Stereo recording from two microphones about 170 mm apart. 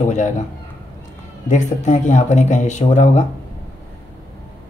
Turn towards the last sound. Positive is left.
turn(degrees=45)  # may be behind; listen again after turning